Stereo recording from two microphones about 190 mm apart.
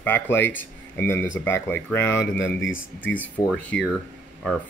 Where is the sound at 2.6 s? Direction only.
90° left.